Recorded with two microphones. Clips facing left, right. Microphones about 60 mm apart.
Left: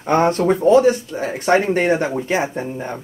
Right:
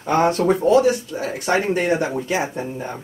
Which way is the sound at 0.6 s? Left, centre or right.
Left.